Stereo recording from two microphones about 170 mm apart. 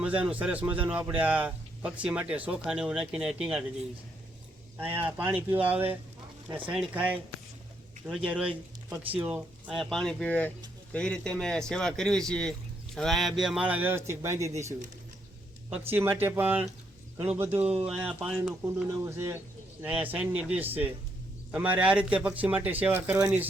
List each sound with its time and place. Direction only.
0.0 s speech: 10° right (ahead or behind)
4.8 s speech: 10° right (ahead or behind)
16.0 s speech: 10° right (ahead or behind)
18.6 s speech: 15° right (ahead or behind)